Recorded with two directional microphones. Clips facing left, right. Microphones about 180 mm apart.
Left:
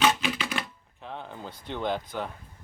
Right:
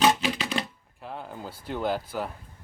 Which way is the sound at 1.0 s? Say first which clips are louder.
Right 1 dB; 5° right (ahead or behind).